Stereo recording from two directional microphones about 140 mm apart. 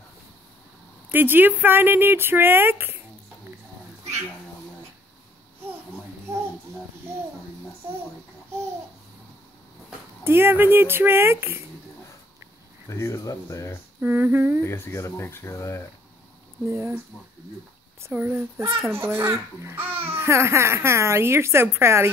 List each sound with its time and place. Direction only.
1.1 s speech: 15° right (ahead or behind)
10.2 s speech: 15° right (ahead or behind)
12.9 s speech: 20° left (ahead or behind)
14.0 s speech: 15° right (ahead or behind)
14.6 s speech: 20° left (ahead or behind)
16.6 s speech: 20° right (ahead or behind)
18.0 s speech: 15° right (ahead or behind)